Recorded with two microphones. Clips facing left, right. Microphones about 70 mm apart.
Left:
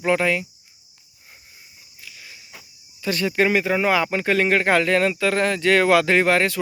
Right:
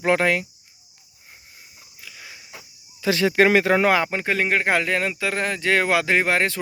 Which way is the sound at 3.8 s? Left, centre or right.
Right.